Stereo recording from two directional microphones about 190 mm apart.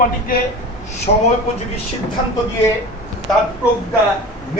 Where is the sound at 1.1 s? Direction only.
45° left (ahead or behind).